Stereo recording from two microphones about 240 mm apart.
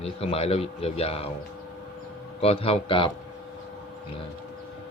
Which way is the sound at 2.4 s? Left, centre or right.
Left.